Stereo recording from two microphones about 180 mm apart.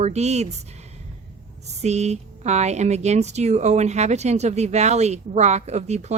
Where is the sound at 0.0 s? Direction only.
40° right (ahead or behind).